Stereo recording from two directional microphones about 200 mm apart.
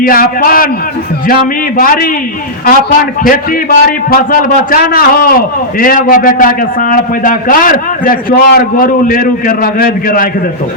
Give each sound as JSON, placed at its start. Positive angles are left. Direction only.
{"t": 0.0, "sound": "a man's voice", "side_deg": 45}
{"t": 3.2, "sound": "a man's voice", "side_deg": 45}